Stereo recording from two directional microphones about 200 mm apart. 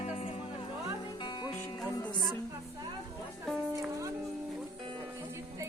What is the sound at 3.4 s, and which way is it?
Music, centre (ahead or behind).